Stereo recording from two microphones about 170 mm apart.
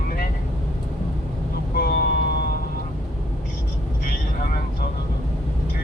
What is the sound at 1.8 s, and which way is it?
Vehicle, 65° left (ahead or behind).